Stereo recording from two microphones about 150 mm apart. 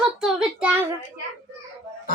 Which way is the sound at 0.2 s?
5° right (ahead or behind).